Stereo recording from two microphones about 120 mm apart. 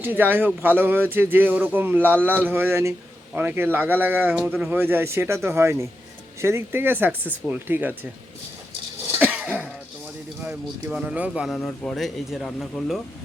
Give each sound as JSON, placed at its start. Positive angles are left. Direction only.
{"t": 0.0, "sound": "speech", "side_deg": -15}
{"t": 9.1, "sound": "cough", "side_deg": -15}
{"t": 10.4, "sound": "speech", "side_deg": -10}
{"t": 11.5, "sound": "speech", "side_deg": 5}